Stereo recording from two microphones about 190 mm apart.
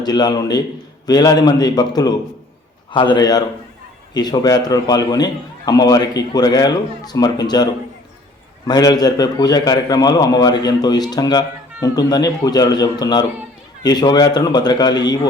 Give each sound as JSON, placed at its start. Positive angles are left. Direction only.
{"t": 0.0, "sound": "a man's voice", "side_deg": 20}